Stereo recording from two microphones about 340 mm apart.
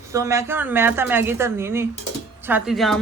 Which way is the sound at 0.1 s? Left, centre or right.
Centre.